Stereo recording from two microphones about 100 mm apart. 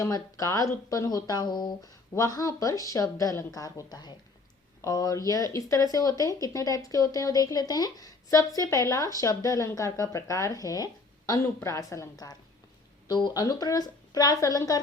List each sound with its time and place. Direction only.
0.0 s speech: 35° left (ahead or behind)